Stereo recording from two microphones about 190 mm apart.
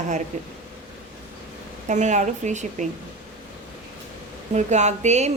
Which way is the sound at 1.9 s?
40° right (ahead or behind).